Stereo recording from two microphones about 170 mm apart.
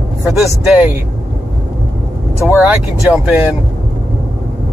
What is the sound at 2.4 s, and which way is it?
Speech, 10° right (ahead or behind).